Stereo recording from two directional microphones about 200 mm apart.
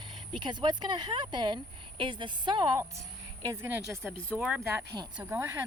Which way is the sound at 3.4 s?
10° right (ahead or behind).